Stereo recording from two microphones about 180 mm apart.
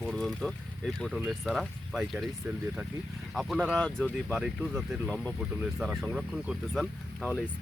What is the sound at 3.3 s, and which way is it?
Speech, centre (ahead or behind).